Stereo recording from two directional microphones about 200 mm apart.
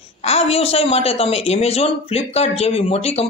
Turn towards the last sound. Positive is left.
turn(degrees=30)  # may be behind; listen again after turning